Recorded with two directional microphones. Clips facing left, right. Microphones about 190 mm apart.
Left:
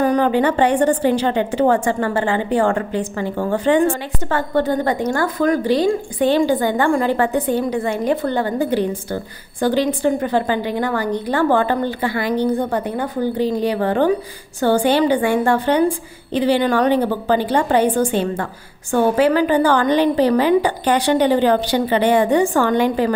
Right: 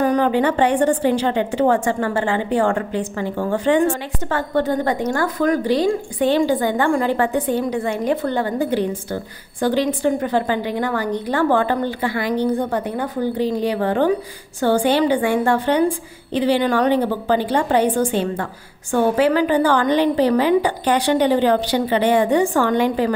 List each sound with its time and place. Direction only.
0.0 s a woman's voice: 40° left (ahead or behind)